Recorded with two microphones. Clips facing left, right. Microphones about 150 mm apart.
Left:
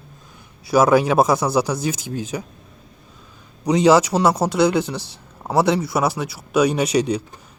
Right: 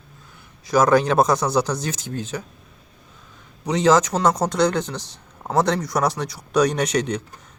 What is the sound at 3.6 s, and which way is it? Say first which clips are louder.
Speech: left 3 dB; 10° left (ahead or behind).